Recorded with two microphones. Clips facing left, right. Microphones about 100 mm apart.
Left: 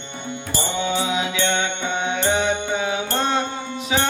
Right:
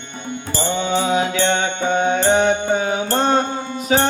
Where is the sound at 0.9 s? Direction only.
40° right (ahead or behind).